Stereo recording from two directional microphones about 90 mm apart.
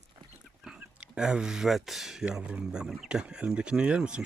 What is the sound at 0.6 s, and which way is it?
Speech, 10° right (ahead or behind).